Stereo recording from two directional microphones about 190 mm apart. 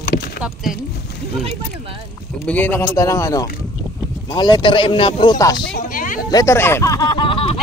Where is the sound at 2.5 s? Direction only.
10° left (ahead or behind).